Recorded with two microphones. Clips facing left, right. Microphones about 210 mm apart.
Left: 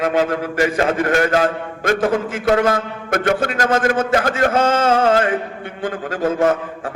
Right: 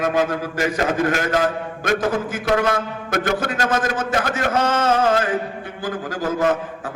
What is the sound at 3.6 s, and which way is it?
A man's voice, 30° left (ahead or behind).